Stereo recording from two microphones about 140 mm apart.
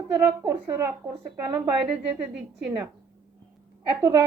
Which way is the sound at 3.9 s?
20° right (ahead or behind).